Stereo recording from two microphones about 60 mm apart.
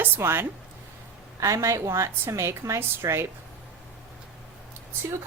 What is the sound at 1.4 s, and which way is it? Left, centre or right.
A woman's voice, right.